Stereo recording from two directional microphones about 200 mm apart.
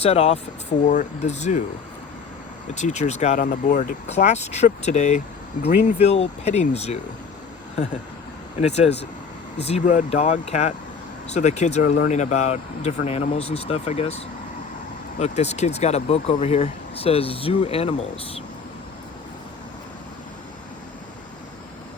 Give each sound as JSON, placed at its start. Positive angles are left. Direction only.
{"t": 0.0, "sound": "speech", "side_deg": 30}
{"t": 2.7, "sound": "speech", "side_deg": 35}
{"t": 8.6, "sound": "speech", "side_deg": 30}